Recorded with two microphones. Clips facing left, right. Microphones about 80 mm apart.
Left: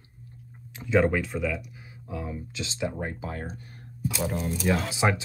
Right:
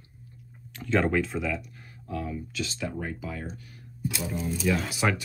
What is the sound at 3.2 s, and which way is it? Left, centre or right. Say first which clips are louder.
Speech: left 1 dB; left.